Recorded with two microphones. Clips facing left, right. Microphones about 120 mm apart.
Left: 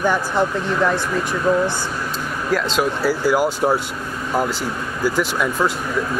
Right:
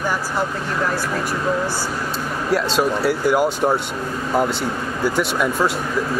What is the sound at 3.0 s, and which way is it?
Speech, 20° right (ahead or behind).